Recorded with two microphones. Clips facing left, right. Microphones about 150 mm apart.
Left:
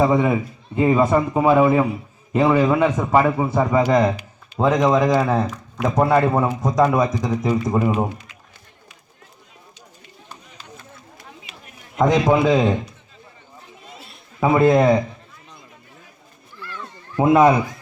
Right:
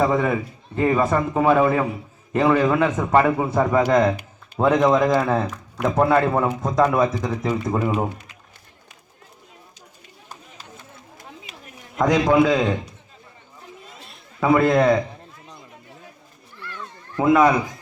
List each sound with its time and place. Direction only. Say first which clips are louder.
0.0 s a man's voice: left 2 dB; 10° left (ahead or behind)
5.0 s a man's voice: left 1 dB; 10° left (ahead or behind)
6.7 s a man's voice: left 1 dB; 15° left (ahead or behind)
11.5 s chop: even; 45° right (ahead or behind)
11.9 s a man's voice: even; 20° left (ahead or behind)
14.5 s a man's voice: left 1 dB; 20° left (ahead or behind)
17.2 s speech: left 2 dB; 25° left (ahead or behind)